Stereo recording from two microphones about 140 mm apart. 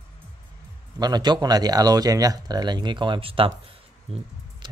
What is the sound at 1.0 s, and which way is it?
Speech, 30° right (ahead or behind).